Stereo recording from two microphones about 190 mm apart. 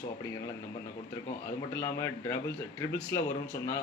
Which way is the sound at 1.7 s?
15° left (ahead or behind).